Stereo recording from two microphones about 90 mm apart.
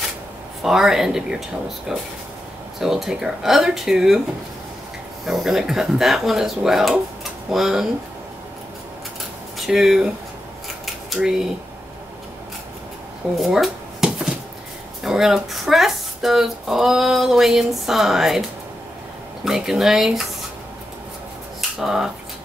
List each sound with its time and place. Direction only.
0.7 s speech: 5° right (ahead or behind)
5.2 s speech: 5° right (ahead or behind)
9.7 s speech: 5° right (ahead or behind)
11.1 s speech: 5° right (ahead or behind)
13.4 s a sound: 5° right (ahead or behind)
15.0 s speech: 5° right (ahead or behind)
19.4 s speech: 5° right (ahead or behind)
21.5 s a sound: 5° right (ahead or behind)